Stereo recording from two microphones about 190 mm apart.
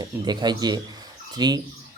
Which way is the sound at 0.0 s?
20° right (ahead or behind).